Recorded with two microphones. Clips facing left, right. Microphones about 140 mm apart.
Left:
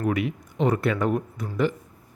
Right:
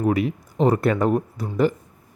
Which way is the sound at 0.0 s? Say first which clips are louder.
Right 4 dB; 35° right (ahead or behind).